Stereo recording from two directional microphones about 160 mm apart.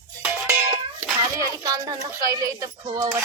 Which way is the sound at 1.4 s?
25° right (ahead or behind).